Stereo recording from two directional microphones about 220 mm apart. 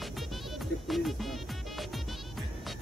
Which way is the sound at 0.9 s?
Centre (ahead or behind).